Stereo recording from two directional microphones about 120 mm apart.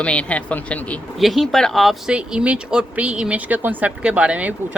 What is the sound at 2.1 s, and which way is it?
A woman's voice, 10° right (ahead or behind).